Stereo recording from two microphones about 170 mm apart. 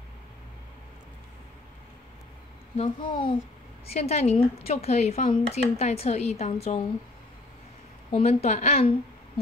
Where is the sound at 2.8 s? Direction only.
30° left (ahead or behind).